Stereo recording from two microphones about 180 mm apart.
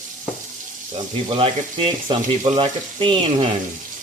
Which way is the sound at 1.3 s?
30° right (ahead or behind).